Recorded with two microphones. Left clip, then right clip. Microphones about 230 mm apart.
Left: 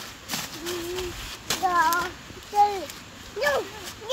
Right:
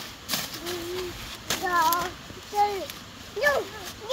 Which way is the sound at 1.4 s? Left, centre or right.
Centre.